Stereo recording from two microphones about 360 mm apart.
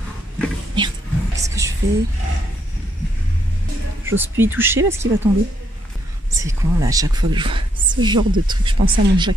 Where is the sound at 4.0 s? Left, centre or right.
Centre.